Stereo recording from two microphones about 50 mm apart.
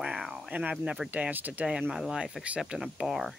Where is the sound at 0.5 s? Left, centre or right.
Right.